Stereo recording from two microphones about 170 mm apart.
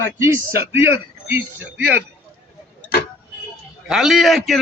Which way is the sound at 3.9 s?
Centre (ahead or behind).